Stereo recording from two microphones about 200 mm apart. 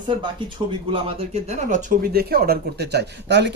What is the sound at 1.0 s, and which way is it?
Speech, 35° right (ahead or behind).